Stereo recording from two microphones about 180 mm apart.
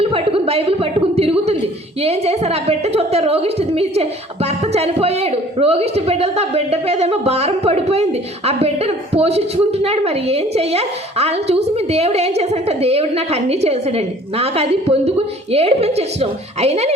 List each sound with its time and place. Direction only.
0.0 s a woman's voice: 30° right (ahead or behind)
4.4 s a sound: 35° right (ahead or behind)
8.4 s a woman's voice: 35° right (ahead or behind)